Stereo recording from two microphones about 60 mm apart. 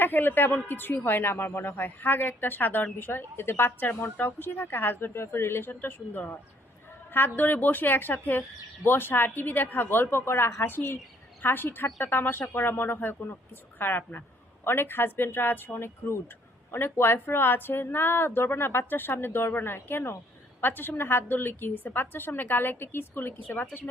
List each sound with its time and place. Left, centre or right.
0.0 s speech: left